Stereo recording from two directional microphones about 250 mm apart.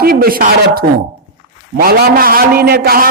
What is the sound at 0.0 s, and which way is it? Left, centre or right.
A man's voice, right.